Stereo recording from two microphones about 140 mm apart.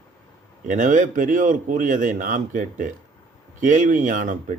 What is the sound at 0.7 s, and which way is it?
Speech, 65° right (ahead or behind).